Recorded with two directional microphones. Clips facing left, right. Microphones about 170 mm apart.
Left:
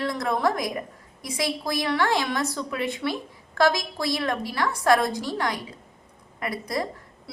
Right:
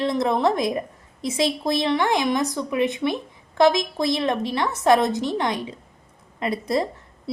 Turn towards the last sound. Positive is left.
turn(degrees=-25)  # may be behind; listen again after turning